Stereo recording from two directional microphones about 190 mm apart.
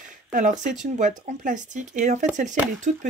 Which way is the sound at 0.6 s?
40° right (ahead or behind).